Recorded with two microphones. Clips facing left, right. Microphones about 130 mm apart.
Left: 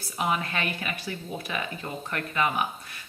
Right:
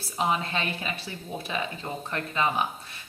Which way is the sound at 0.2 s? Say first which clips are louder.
Right 1 dB; 30° right (ahead or behind).